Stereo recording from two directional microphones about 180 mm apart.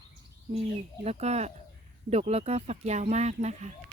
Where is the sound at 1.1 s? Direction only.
35° right (ahead or behind).